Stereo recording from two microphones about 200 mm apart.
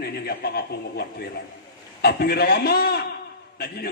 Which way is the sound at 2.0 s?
55° left (ahead or behind).